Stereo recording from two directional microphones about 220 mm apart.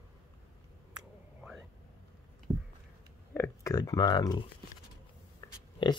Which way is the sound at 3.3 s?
15° left (ahead or behind).